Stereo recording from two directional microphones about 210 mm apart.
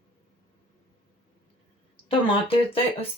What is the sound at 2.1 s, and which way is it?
Speech, 25° left (ahead or behind).